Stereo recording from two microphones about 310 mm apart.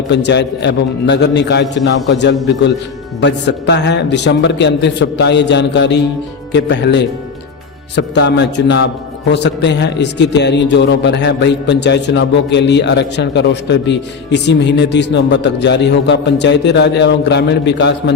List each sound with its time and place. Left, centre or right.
0.1 s a man's voice: left